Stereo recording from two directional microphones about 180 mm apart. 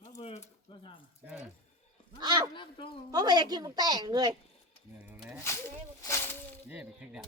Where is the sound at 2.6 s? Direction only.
30° left (ahead or behind).